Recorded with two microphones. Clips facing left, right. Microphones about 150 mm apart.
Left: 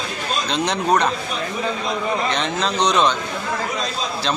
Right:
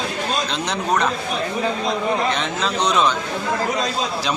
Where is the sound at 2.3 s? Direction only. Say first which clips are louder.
Left 1 dB; centre (ahead or behind).